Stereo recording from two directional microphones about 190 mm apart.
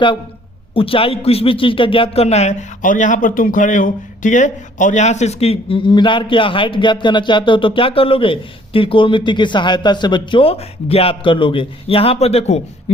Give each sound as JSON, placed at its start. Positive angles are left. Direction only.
{"t": 0.7, "sound": "a man's voice", "side_deg": 30}